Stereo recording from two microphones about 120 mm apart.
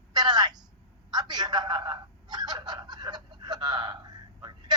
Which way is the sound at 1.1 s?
35° right (ahead or behind).